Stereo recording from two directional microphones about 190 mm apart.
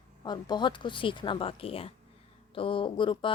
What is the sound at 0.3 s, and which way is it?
Speech, 25° left (ahead or behind).